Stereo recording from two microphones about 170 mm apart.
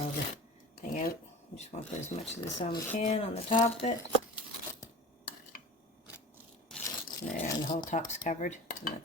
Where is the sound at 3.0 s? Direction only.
45° left (ahead or behind).